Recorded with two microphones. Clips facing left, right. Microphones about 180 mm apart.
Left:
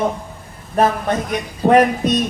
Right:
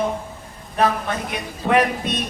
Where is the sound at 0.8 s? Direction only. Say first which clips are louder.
Left 4 dB; 40° left (ahead or behind).